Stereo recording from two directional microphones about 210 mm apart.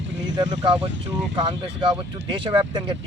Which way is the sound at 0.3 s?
20° right (ahead or behind).